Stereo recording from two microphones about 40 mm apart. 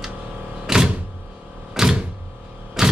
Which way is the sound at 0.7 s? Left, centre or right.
Centre.